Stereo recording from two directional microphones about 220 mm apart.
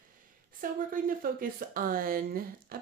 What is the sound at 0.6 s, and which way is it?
Speech, 40° right (ahead or behind).